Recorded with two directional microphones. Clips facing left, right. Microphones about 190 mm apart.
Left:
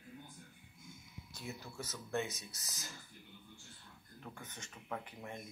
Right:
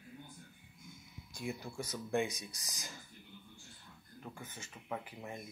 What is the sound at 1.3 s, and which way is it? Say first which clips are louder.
Speech: right 5 dB; 10° right (ahead or behind).